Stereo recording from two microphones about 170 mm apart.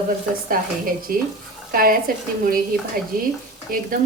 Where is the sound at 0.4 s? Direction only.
55° right (ahead or behind).